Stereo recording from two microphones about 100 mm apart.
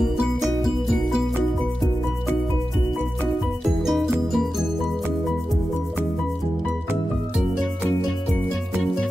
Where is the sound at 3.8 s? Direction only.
Centre (ahead or behind).